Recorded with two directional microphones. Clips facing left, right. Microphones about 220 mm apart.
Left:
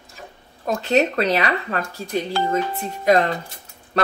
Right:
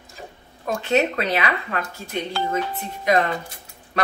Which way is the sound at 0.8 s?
40° left (ahead or behind).